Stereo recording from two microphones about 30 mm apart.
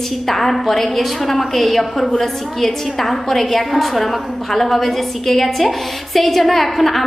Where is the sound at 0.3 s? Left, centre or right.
Centre.